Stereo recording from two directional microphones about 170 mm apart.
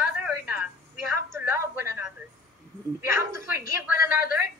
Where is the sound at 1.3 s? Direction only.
15° right (ahead or behind).